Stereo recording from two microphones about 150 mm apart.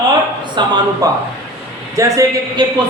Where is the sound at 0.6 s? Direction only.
30° right (ahead or behind).